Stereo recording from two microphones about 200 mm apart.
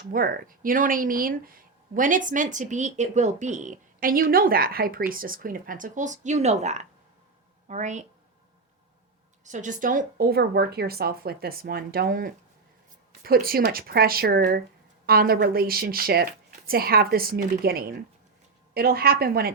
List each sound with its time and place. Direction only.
0.1 s speech: 45° right (ahead or behind)
9.4 s speech: 40° right (ahead or behind)